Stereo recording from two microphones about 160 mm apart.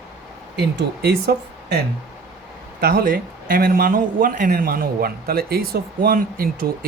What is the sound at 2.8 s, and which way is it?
A man's voice, 65° right (ahead or behind).